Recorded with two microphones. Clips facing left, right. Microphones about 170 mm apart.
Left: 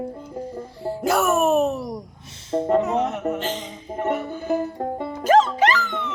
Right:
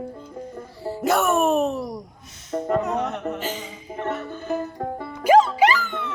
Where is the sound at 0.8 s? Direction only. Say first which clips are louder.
Even; centre (ahead or behind).